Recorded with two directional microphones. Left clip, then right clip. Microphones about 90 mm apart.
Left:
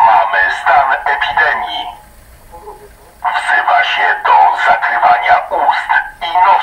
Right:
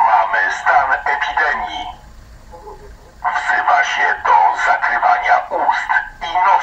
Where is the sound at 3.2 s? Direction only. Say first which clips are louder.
Left 4 dB; 40° right (ahead or behind).